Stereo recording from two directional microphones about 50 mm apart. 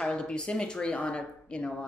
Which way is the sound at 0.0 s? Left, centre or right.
Centre.